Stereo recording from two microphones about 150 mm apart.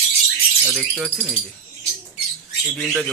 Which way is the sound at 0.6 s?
Centre (ahead or behind).